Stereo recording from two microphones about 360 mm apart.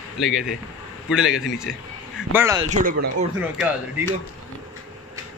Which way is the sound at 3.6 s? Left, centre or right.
Centre.